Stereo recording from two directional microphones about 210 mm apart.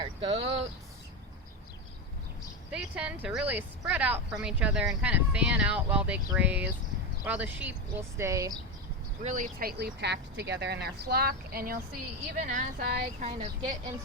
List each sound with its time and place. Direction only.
0.0 s a sound: 25° right (ahead or behind)
2.7 s speech: 5° right (ahead or behind)
9.2 s speech: 40° right (ahead or behind)
13.2 s speech: 30° right (ahead or behind)